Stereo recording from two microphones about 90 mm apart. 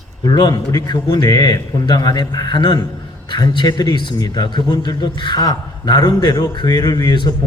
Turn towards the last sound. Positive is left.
turn(degrees=55)  # may be behind; listen again after turning